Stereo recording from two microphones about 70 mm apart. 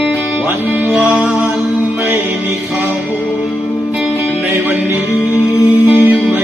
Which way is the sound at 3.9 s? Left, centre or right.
Right.